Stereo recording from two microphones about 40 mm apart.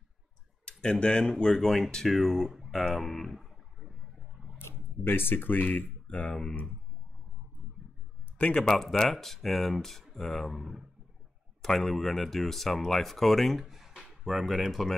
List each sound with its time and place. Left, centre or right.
0.7 s speech: left; by 2.5 s centre
2.9 s a sound: centre
5.0 s speech: left
6.0 s speech: left
8.5 s speech: centre
10.4 s speech: centre
11.6 s speech: centre